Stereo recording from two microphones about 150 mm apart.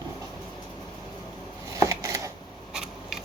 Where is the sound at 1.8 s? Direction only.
20° right (ahead or behind).